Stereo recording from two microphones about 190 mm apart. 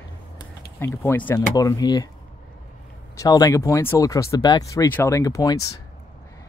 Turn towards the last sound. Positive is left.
turn(degrees=20)  # may be behind; listen again after turning